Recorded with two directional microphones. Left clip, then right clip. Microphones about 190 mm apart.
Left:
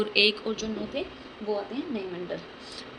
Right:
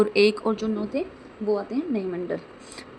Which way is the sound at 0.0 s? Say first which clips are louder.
Right 4 dB; 55° right (ahead or behind).